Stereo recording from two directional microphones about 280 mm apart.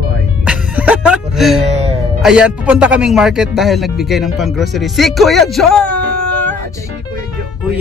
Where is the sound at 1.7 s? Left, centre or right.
Right.